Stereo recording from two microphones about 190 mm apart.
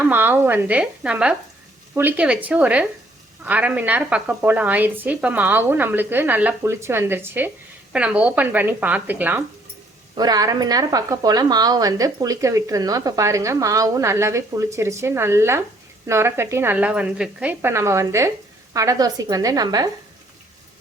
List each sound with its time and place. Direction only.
0.1 s speech: 10° right (ahead or behind)
10.2 s speech: 20° right (ahead or behind)